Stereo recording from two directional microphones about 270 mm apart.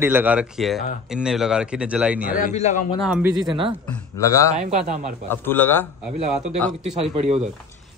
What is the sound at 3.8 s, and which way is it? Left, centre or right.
Speech, centre.